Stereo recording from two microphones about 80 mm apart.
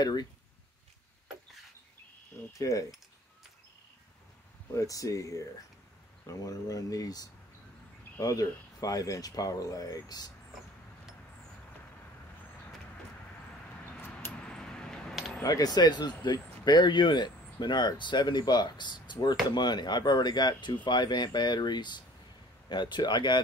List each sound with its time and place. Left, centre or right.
0.0 s speech: left
2.5 s speech: left
4.7 s speech: left
13.7 s a sound: left
14.3 s coin: centre
15.4 s speech: left